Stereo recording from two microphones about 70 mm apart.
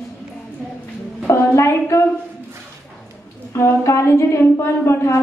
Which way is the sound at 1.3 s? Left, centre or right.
Left.